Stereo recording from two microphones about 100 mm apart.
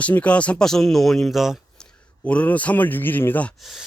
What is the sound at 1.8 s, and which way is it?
A man's voice, 10° left (ahead or behind).